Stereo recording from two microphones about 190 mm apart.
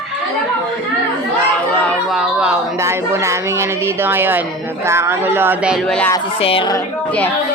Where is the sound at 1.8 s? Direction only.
5° right (ahead or behind).